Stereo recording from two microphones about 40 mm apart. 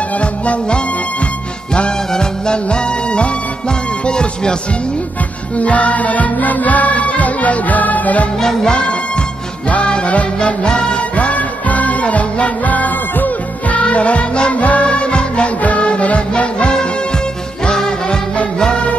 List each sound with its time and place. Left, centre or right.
0.2 s music: left
5.6 s music: left
8.4 s music: centre
8.7 s music: left
11.1 s music: left
13.7 s music: left